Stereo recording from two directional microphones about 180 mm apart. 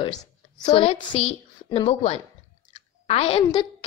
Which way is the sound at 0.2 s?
25° left (ahead or behind).